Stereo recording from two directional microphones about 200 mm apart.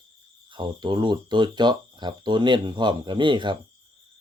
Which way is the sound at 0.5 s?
20° right (ahead or behind).